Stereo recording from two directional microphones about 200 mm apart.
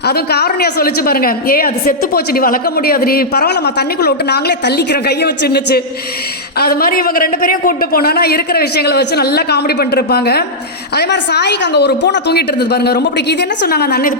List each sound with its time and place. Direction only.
0.0 s a woman's voice: 55° left (ahead or behind)